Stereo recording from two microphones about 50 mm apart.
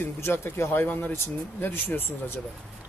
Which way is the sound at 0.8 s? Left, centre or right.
Left.